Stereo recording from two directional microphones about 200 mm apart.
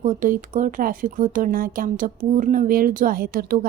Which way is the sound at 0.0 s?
40° right (ahead or behind).